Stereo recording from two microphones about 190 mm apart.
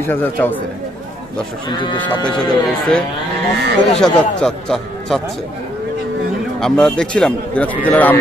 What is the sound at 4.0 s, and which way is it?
A man's voice, 5° left (ahead or behind).